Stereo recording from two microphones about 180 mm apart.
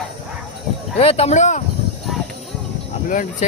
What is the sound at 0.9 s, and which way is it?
Speech, 35° left (ahead or behind).